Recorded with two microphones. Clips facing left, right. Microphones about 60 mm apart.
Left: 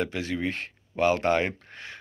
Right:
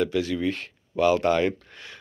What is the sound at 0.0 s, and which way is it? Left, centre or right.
Speech, left.